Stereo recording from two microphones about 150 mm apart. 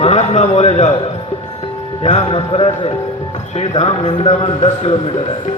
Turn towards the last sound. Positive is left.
turn(degrees=45)  # may be behind; listen again after turning